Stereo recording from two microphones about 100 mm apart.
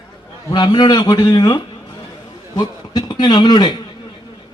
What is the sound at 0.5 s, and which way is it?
A man's voice, 50° left (ahead or behind).